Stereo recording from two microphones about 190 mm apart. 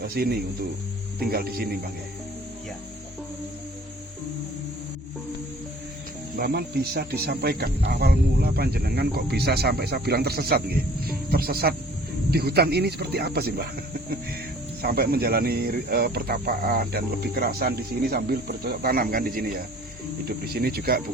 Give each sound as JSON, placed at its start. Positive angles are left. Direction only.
{"t": 0.0, "sound": "speech", "side_deg": -55}
{"t": 6.3, "sound": "speech", "side_deg": -50}
{"t": 14.8, "sound": "speech", "side_deg": -55}